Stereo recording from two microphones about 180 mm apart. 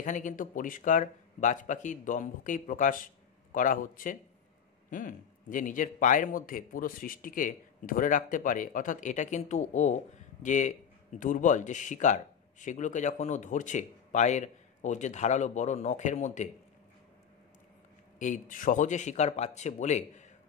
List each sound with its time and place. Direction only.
0.0 s a man's voice: 45° left (ahead or behind)
18.2 s speech: 45° left (ahead or behind)